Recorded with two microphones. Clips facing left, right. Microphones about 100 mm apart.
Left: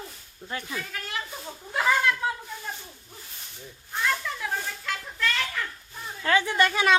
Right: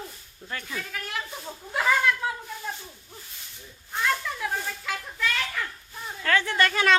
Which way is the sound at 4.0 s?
Centre (ahead or behind).